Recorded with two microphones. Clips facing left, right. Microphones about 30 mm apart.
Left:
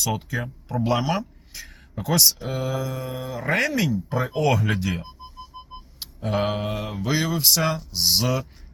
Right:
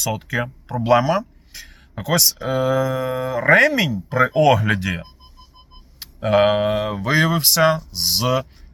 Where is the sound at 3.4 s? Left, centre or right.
Right.